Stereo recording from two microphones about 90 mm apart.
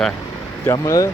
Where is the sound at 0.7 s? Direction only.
35° left (ahead or behind).